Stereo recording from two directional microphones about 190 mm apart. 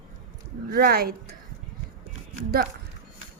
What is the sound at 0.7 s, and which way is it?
Speech, 55° right (ahead or behind).